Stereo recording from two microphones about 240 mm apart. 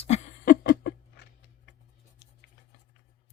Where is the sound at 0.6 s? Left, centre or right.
Left.